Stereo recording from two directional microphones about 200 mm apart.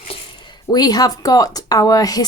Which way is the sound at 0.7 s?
20° left (ahead or behind).